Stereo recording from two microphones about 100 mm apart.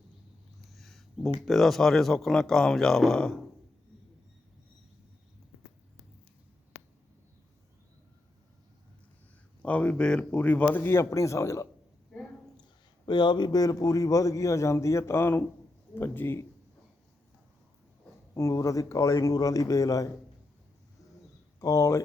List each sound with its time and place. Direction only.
0.7 s a sound: centre (ahead or behind)
1.4 s speech: centre (ahead or behind)
9.6 s speech: 15° left (ahead or behind); by 11.7 s 30° left (ahead or behind)
13.1 s a man's voice: 50° left (ahead or behind); by 16.5 s 20° left (ahead or behind)
18.3 s a man's voice: 30° left (ahead or behind)
21.6 s a man's voice: 35° left (ahead or behind)